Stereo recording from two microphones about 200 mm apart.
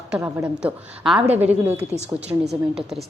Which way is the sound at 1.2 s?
30° right (ahead or behind).